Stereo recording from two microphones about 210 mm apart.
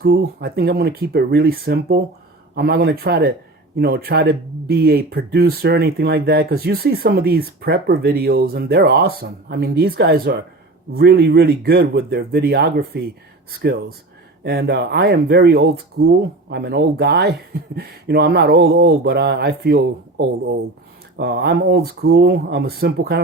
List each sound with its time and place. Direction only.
0.0 s speech: 50° right (ahead or behind)